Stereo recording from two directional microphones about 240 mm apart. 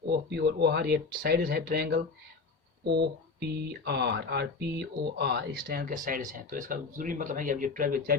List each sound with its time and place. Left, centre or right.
0.1 s speech: right